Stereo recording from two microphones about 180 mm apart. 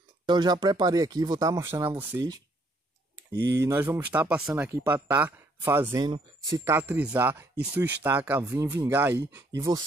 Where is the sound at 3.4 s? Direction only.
70° right (ahead or behind).